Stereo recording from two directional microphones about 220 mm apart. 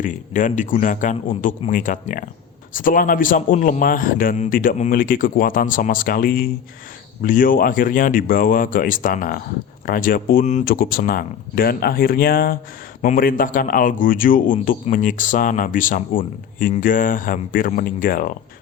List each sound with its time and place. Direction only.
0.0 s speech: 35° left (ahead or behind)